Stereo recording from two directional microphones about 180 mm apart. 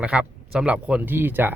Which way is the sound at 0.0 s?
5° right (ahead or behind).